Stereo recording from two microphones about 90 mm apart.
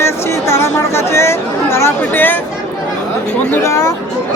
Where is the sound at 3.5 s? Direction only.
30° left (ahead or behind).